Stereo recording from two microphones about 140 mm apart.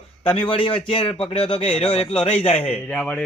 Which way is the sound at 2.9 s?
10° left (ahead or behind).